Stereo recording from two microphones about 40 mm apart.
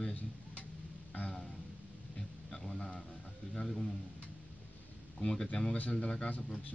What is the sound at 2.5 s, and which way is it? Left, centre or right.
Music, centre.